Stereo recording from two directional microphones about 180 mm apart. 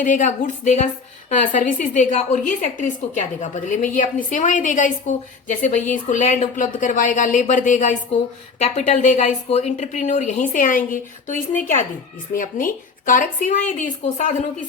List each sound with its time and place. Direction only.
0.0 s a woman's voice: 45° left (ahead or behind)